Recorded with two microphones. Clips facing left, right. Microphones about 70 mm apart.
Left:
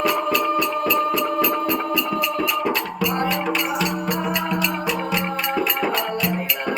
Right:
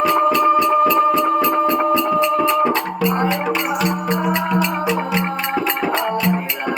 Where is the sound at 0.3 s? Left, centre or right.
Right.